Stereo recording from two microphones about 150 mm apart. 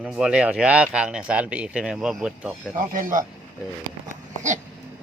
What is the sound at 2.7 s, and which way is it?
Speech, 65° right (ahead or behind).